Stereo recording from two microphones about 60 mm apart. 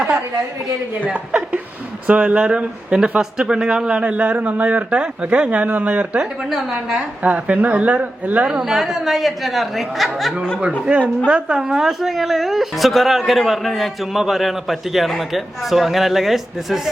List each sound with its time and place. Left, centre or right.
1.0 s speech: right
6.5 s a woman's voice: centre
7.2 s speech: right
8.6 s a woman's voice: centre
11.3 s a woman's voice: centre